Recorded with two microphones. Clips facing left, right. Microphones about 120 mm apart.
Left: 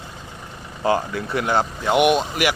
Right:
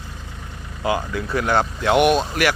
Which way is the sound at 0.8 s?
35° left (ahead or behind).